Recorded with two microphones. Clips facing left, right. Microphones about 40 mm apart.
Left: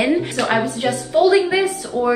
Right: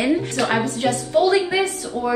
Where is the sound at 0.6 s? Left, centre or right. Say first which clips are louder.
Left 1 dB; centre.